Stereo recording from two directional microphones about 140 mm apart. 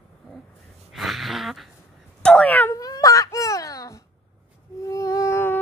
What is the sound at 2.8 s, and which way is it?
Baby cry, 25° left (ahead or behind).